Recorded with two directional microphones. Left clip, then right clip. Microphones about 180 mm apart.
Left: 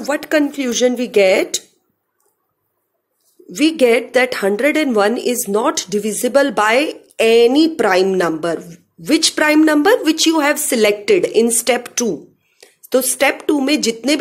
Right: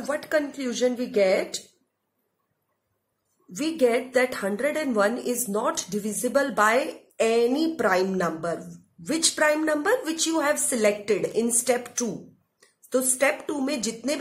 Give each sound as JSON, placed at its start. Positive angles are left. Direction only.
{"t": 0.0, "sound": "a woman's voice", "side_deg": 45}
{"t": 3.5, "sound": "a woman's voice", "side_deg": 45}